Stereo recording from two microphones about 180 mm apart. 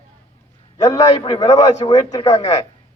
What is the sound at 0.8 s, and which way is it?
A man's voice, 20° left (ahead or behind).